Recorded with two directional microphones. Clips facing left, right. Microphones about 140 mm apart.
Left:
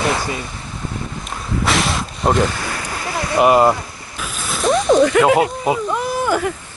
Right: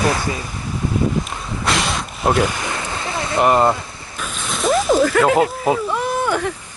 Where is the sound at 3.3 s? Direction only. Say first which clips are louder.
Left 2 dB; 5° left (ahead or behind).